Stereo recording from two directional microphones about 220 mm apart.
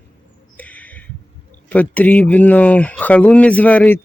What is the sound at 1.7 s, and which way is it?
Speech, 5° left (ahead or behind).